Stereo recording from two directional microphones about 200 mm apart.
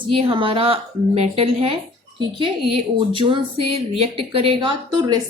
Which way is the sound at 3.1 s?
25° right (ahead or behind).